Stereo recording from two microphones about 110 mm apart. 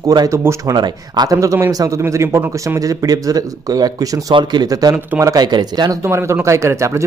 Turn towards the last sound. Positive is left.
turn(degrees=-25)  # may be behind; listen again after turning